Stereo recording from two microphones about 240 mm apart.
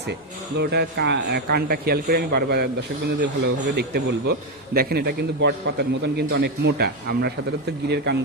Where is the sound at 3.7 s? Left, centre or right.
Right.